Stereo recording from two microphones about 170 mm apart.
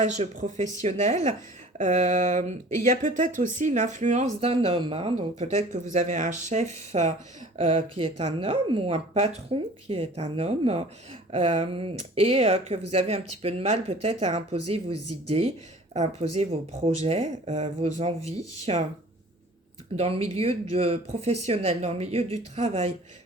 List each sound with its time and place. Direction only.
0.0 s speech: 45° right (ahead or behind)
20.0 s speech: 40° right (ahead or behind)